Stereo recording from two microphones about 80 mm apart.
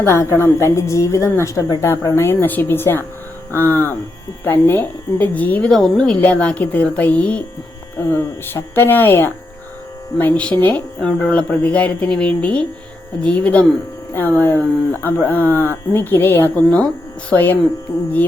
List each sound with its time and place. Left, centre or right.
0.0 s a woman's voice: left
1.8 s speech: left; by 7.4 s centre
7.9 s speech: left